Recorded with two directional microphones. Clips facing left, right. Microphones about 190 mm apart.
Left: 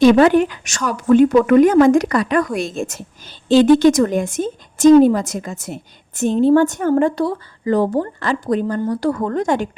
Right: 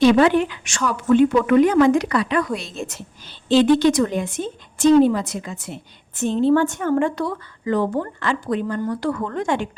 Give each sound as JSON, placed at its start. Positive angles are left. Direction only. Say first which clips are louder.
{"t": 0.0, "sound": "a woman's voice", "louder": "left 4 dB", "side_deg": 45}